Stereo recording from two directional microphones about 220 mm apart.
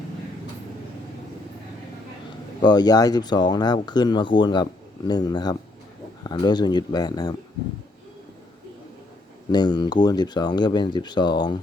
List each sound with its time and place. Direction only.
2.6 s speech: 20° left (ahead or behind)
9.5 s speech: 20° left (ahead or behind)